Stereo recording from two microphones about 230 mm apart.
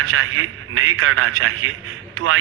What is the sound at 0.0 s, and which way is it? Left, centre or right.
A man's voice, right.